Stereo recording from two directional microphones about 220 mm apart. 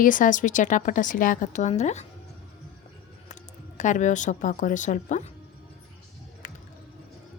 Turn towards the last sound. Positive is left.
turn(degrees=35)  # may be behind; listen again after turning